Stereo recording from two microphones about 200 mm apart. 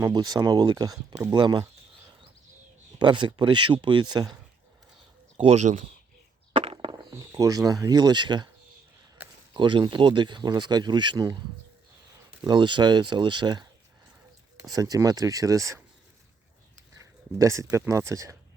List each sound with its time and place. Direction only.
0.0 s speech: 20° right (ahead or behind)
3.0 s speech: 25° right (ahead or behind)
5.4 s speech: 35° right (ahead or behind)
6.5 s a sound: 25° right (ahead or behind)
7.1 s speech: 15° right (ahead or behind)
9.6 s speech: 25° right (ahead or behind)
12.5 s speech: 25° right (ahead or behind)
17.3 s speech: 15° right (ahead or behind)